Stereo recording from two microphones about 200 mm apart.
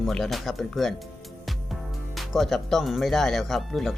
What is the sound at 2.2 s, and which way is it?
Speech, centre (ahead or behind).